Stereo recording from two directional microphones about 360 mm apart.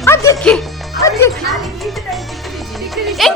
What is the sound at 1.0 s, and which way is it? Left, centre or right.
Music, centre.